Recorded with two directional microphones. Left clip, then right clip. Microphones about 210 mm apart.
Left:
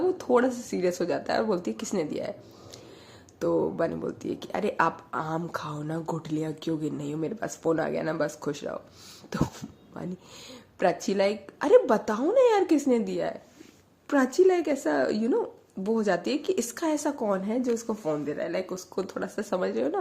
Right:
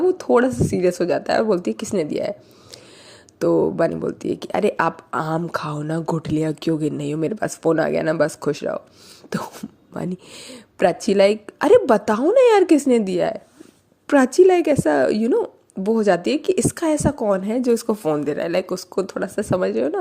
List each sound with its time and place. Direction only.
0.1 s a woman's voice: 30° right (ahead or behind)
3.3 s a woman's voice: 35° right (ahead or behind)